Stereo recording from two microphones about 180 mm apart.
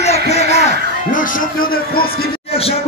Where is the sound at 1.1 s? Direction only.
50° left (ahead or behind).